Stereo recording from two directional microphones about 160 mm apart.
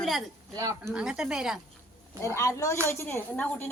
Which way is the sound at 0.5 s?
20° right (ahead or behind).